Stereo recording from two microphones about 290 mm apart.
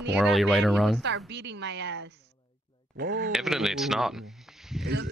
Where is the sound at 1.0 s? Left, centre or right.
Right.